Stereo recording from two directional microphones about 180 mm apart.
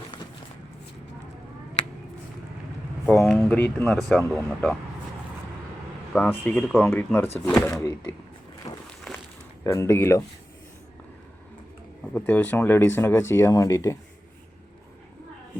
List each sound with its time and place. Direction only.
3.1 s speech: centre (ahead or behind)
3.3 s speech: 10° left (ahead or behind)
6.1 s speech: 5° left (ahead or behind)
8.7 s a sound: 15° left (ahead or behind)
9.6 s speech: 15° left (ahead or behind)
12.1 s speech: 10° left (ahead or behind)